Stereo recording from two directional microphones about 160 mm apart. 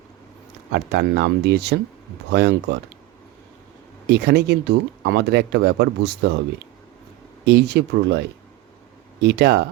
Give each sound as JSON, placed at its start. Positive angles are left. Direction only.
{"t": 0.7, "sound": "speech", "side_deg": -90}
{"t": 4.0, "sound": "speech", "side_deg": -90}
{"t": 7.4, "sound": "speech", "side_deg": -90}